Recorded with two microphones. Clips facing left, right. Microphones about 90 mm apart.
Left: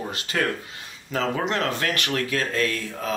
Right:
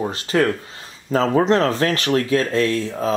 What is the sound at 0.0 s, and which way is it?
Speech, 30° right (ahead or behind).